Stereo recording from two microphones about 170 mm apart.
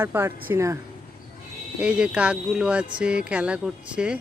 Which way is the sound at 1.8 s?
5° right (ahead or behind).